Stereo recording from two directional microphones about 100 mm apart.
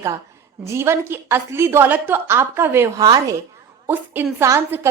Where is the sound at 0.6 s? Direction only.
25° right (ahead or behind).